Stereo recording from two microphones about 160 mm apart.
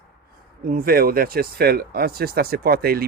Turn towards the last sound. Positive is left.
turn(degrees=-70)  # may be behind; listen again after turning